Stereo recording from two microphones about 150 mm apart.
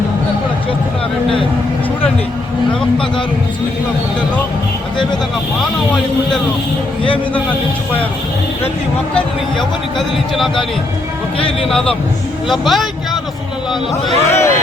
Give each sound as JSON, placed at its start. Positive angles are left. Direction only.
{"t": 11.7, "sound": "speech", "side_deg": 5}
{"t": 13.9, "sound": "speech", "side_deg": 20}